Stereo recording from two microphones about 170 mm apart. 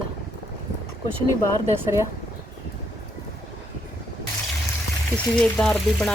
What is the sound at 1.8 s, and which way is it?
Frying, 15° right (ahead or behind).